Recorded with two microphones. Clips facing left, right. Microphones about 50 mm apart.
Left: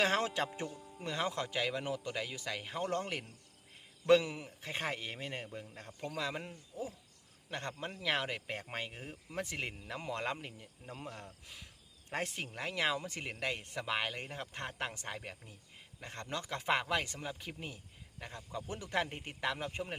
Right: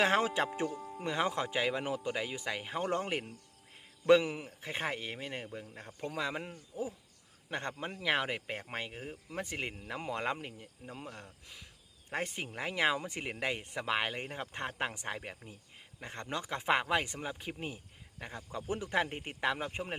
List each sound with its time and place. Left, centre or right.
0.0 s speech: centre
0.7 s speech: right
0.9 s speech: centre